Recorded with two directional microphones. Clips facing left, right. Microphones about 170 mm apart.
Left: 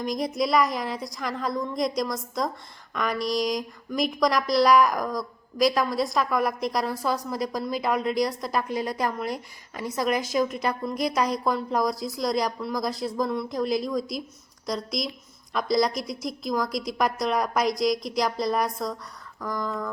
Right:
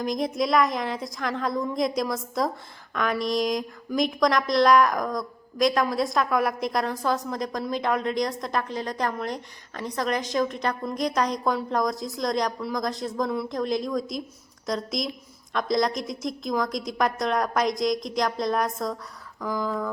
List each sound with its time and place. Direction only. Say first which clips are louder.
0.0 s speech: right 1 dB; centre (ahead or behind)